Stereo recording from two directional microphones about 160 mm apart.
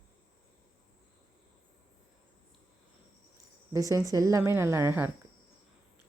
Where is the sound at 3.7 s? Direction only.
20° right (ahead or behind).